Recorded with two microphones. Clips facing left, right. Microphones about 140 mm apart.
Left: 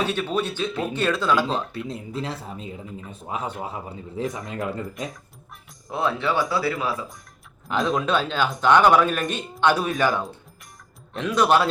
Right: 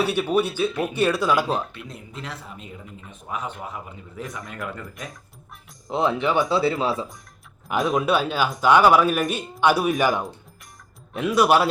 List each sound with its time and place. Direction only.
0.0 s speech: 10° right (ahead or behind)
1.9 s a man's voice: 30° left (ahead or behind)
5.9 s speech: 20° right (ahead or behind)
7.9 s speech: 5° right (ahead or behind)